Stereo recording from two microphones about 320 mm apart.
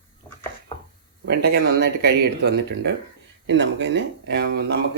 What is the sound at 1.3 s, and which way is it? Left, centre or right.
Speech, right.